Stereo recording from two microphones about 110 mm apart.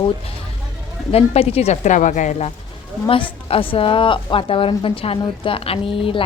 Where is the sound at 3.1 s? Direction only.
55° left (ahead or behind).